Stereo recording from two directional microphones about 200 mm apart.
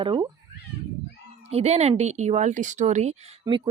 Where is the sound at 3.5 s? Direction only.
15° right (ahead or behind).